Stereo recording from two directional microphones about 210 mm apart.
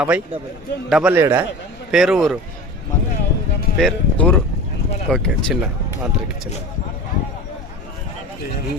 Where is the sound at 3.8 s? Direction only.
Centre (ahead or behind).